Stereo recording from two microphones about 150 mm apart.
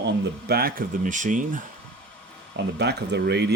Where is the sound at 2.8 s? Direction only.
90° right.